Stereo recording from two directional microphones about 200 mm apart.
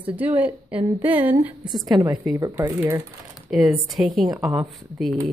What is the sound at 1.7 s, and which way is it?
A woman's voice, 20° right (ahead or behind).